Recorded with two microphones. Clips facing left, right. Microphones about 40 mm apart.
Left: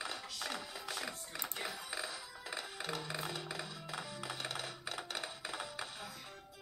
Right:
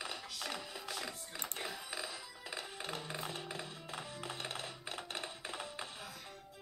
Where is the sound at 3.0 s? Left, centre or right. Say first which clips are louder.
Left 1 dB; left.